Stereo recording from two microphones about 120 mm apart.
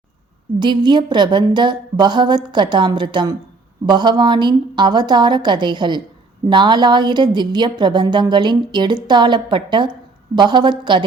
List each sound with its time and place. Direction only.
0.6 s a woman's voice: 40° right (ahead or behind)